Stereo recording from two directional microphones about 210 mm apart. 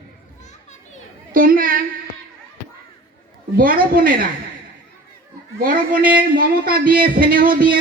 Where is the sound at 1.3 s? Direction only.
40° right (ahead or behind).